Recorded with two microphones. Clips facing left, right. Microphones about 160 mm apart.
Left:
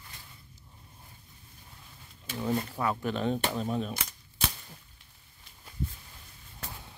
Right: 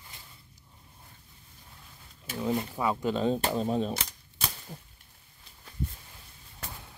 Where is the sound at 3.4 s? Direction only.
30° right (ahead or behind).